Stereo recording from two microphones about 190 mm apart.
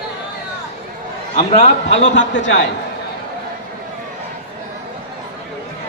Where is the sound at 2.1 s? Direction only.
75° left (ahead or behind).